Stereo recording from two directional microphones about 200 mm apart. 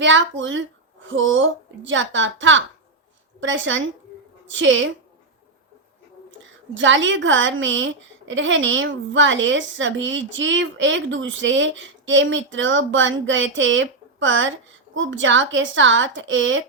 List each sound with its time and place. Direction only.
0.0 s a woman's voice: 70° right (ahead or behind)
6.7 s a woman's voice: 70° right (ahead or behind)